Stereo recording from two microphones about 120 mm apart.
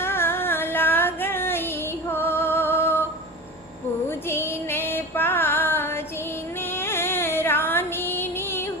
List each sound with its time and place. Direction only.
0.0 s music: 20° left (ahead or behind)
4.3 s female singing: 20° left (ahead or behind)
6.6 s music: 20° left (ahead or behind)